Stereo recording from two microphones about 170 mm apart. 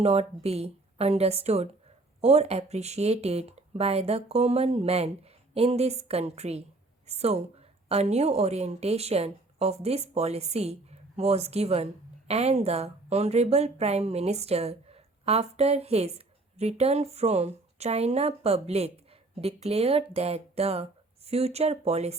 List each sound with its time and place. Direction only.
0.0 s speech: 35° right (ahead or behind)